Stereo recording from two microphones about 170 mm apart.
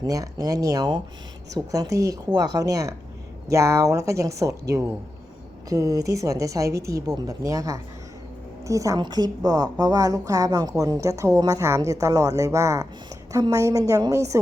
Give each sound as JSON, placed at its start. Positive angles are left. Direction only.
{"t": 0.0, "sound": "a woman's voice", "side_deg": -20}
{"t": 5.6, "sound": "a woman's voice", "side_deg": -20}